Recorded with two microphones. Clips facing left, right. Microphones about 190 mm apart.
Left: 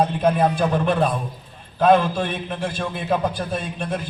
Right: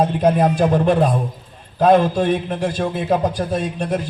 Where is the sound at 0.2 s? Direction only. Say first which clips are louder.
Right 3 dB; 40° right (ahead or behind).